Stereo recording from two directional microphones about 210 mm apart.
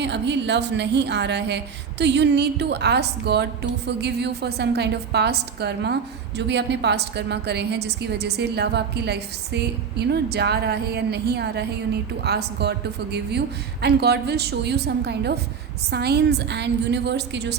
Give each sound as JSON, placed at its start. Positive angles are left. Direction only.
{"t": 0.0, "sound": "a woman's voice", "side_deg": -55}